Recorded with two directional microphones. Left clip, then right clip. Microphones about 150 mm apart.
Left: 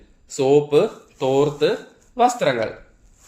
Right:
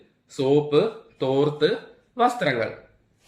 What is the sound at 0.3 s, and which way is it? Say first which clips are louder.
A man's voice: left 4 dB; 30° left (ahead or behind).